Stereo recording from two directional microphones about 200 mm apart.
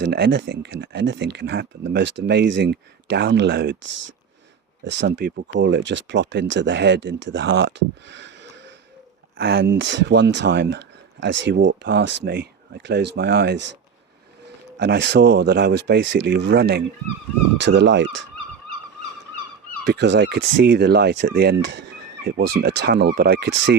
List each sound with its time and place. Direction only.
0.0 s speech: 55° right (ahead or behind)
14.8 s speech: 60° right (ahead or behind)
17.6 s speech: 65° right (ahead or behind)
19.8 s speech: 60° right (ahead or behind)